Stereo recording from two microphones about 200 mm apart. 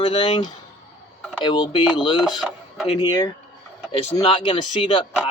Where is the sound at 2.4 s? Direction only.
Centre (ahead or behind).